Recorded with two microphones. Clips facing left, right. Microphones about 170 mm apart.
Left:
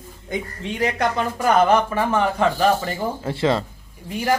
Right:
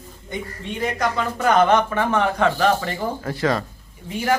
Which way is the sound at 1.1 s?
10° left (ahead or behind).